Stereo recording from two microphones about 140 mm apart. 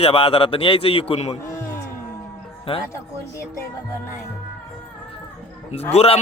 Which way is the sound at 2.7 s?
40° left (ahead or behind).